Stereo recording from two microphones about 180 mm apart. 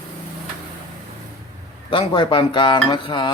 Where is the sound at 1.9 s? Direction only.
30° left (ahead or behind).